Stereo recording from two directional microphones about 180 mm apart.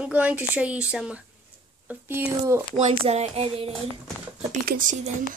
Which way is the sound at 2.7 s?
40° right (ahead or behind).